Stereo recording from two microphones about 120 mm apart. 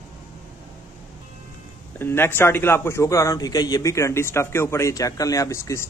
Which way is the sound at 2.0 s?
20° left (ahead or behind).